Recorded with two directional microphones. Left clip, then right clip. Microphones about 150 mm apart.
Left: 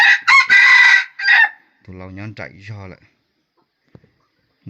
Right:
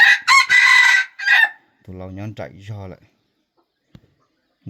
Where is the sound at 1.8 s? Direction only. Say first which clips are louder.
Right 1 dB; 15° right (ahead or behind).